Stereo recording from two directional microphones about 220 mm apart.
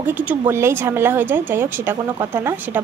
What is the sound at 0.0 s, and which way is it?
Speech, 5° right (ahead or behind).